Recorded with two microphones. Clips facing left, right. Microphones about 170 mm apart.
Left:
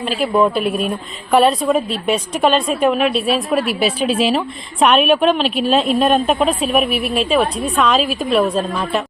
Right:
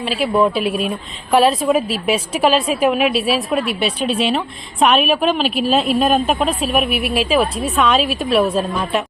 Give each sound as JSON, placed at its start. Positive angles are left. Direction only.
{"t": 0.0, "sound": "a woman's voice", "side_deg": -5}